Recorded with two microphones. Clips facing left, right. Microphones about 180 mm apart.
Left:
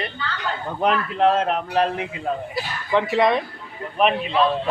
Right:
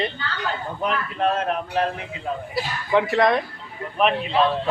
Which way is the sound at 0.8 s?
75° left (ahead or behind).